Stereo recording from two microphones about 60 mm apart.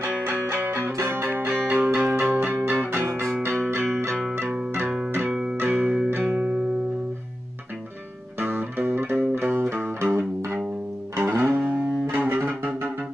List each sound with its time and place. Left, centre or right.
0.2 s music: right; by 2.2 s centre
2.2 s music: right
3.0 s music: right
5.3 s music: centre
5.6 s music: right
8.4 s music: right
11.2 s music: right